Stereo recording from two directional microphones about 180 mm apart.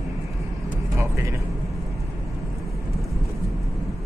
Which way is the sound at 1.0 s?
15° right (ahead or behind).